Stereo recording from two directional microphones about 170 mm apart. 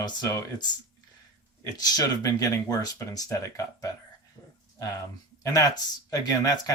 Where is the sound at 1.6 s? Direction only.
20° left (ahead or behind).